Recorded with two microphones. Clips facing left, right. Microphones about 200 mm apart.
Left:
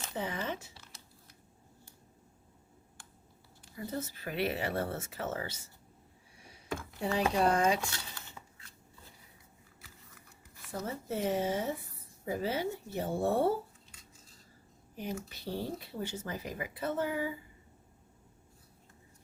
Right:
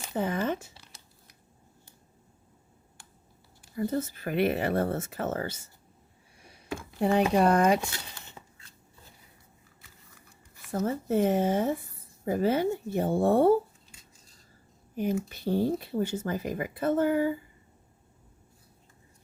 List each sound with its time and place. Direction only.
0.2 s speech: 50° right (ahead or behind)
0.7 s crumpling: 15° right (ahead or behind)
3.8 s speech: 50° right (ahead or behind)
7.0 s speech: 60° right (ahead or behind)
7.8 s a sound: 20° right (ahead or behind)
10.7 s speech: 50° right (ahead or behind)
14.9 s speech: 50° right (ahead or behind)